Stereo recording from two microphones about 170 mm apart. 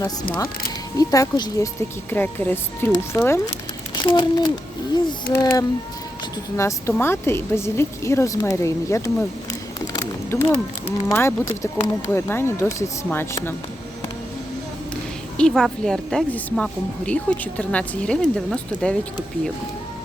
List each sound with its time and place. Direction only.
0.0 s speech: 20° left (ahead or behind)
3.9 s speech: 25° left (ahead or behind)
5.3 s a woman's voice: 15° left (ahead or behind)
15.4 s a woman's voice: 5° left (ahead or behind)